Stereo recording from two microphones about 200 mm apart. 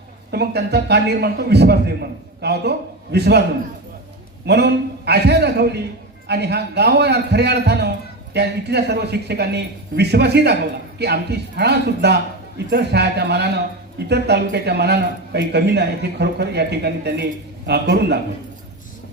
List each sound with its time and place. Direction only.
0.3 s a man's voice: 55° right (ahead or behind)
4.4 s a man's voice: 55° right (ahead or behind)